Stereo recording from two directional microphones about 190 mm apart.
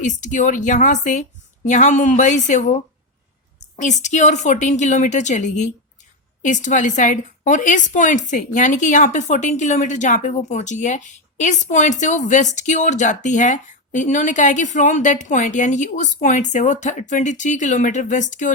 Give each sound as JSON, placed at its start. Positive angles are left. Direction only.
{"t": 0.0, "sound": "a woman's voice", "side_deg": 40}